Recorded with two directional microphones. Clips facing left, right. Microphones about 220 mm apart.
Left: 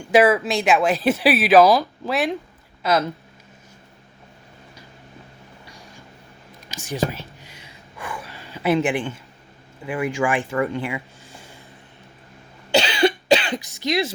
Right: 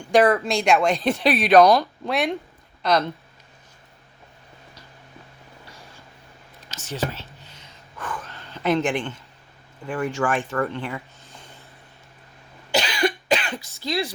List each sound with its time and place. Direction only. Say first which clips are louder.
0.0 s speech: left 2 dB; 5° left (ahead or behind)
6.7 s whispering: left 4 dB; 10° left (ahead or behind)
9.8 s speech: left 2 dB; 10° left (ahead or behind)
12.8 s cough: left 4 dB; 25° left (ahead or behind)
13.7 s speech: left 3 dB; 15° left (ahead or behind)